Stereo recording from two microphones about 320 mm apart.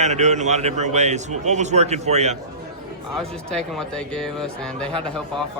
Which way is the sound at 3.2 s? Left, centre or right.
Centre.